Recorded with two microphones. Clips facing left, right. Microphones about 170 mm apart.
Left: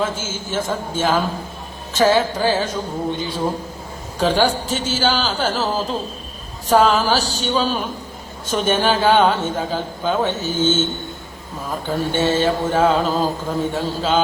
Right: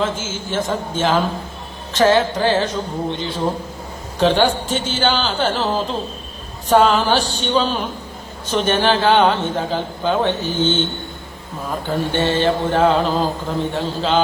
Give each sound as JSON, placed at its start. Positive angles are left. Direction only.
{"t": 0.3, "sound": "mantra", "side_deg": 10}
{"t": 6.7, "sound": "a sound", "side_deg": 5}
{"t": 7.4, "sound": "mantra", "side_deg": 10}
{"t": 10.4, "sound": "mantra", "side_deg": 45}
{"t": 11.7, "sound": "mantra", "side_deg": 5}